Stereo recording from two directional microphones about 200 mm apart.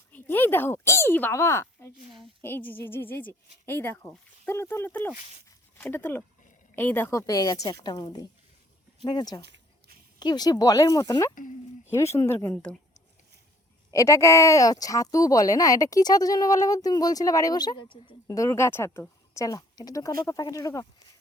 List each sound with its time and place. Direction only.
0.1 s speech: 10° left (ahead or behind)
5.5 s a sound: 10° left (ahead or behind)
6.7 s speech: 10° left (ahead or behind)
9.4 s a sound: 55° right (ahead or behind)
10.2 s speech: 20° left (ahead or behind)
13.9 s speech: 15° left (ahead or behind)